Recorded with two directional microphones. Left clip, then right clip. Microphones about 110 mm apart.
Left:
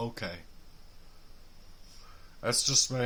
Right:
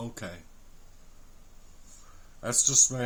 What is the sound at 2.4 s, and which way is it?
Speech, 20° left (ahead or behind).